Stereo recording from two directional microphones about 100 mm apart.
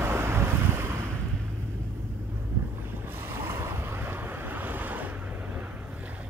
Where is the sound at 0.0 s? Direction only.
25° right (ahead or behind).